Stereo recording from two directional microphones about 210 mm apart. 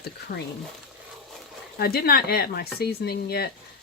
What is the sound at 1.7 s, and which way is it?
Speech, 45° left (ahead or behind).